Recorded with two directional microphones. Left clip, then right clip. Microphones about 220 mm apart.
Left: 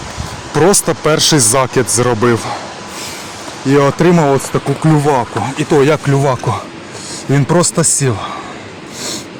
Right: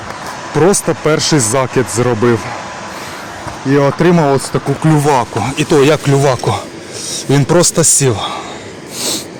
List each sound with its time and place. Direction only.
0.5 s speech: centre (ahead or behind)
3.7 s speech: 10° left (ahead or behind)